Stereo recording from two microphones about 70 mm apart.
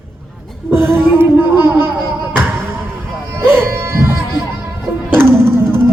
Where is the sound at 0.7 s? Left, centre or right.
Right.